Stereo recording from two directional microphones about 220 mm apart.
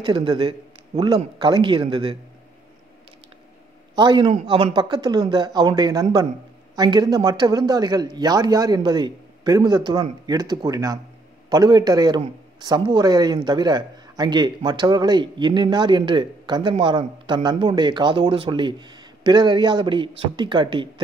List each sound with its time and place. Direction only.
0.0 s speech: 20° right (ahead or behind)
3.9 s a man's voice: 20° right (ahead or behind)